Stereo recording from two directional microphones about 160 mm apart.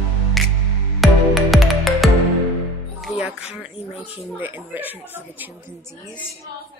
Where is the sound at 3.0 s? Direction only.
5° right (ahead or behind).